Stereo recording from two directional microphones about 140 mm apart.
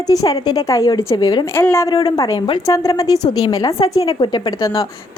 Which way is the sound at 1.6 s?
20° left (ahead or behind).